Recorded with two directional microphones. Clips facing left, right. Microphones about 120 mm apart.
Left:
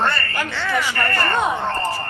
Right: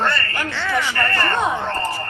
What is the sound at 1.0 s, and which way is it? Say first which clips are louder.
Speech: even; 15° left (ahead or behind).